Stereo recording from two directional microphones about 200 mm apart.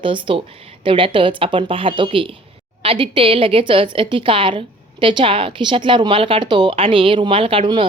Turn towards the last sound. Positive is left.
turn(degrees=-25)  # may be behind; listen again after turning